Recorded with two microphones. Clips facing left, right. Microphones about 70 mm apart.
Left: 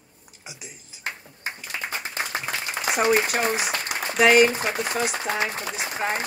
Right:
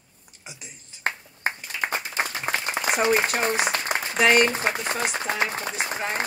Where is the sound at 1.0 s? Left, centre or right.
Right.